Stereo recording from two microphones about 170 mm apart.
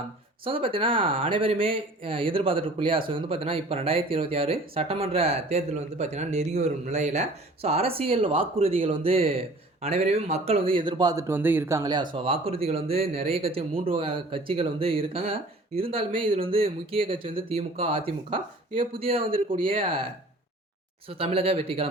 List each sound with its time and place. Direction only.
0.4 s speech: 30° right (ahead or behind)
12.1 s speech: 35° right (ahead or behind)
21.1 s speech: 35° right (ahead or behind)